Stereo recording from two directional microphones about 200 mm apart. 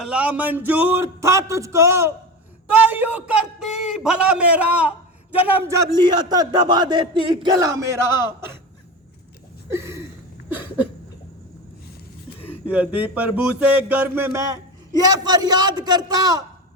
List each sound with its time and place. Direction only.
0.0 s a man's voice: 5° right (ahead or behind)
9.7 s a sound: 15° right (ahead or behind)
10.5 s a man's voice: 10° right (ahead or behind)
12.6 s a man's voice: 5° right (ahead or behind)